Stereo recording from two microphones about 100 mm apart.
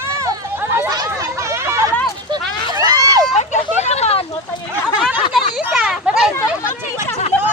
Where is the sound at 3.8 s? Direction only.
90° left.